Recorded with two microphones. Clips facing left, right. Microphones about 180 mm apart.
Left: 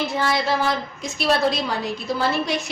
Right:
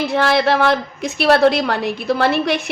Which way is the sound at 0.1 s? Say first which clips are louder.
Right 6 dB; 65° right (ahead or behind).